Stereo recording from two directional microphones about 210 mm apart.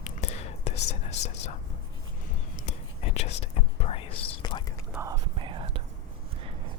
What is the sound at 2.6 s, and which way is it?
Whispering, 30° left (ahead or behind).